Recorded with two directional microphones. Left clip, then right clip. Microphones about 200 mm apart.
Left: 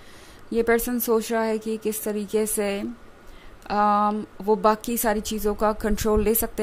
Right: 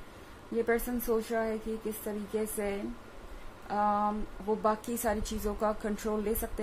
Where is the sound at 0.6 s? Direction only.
50° left (ahead or behind).